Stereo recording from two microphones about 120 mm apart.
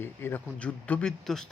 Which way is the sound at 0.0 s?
15° left (ahead or behind).